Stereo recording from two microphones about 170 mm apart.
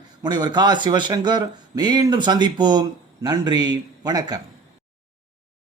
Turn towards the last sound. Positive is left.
turn(degrees=-25)  # may be behind; listen again after turning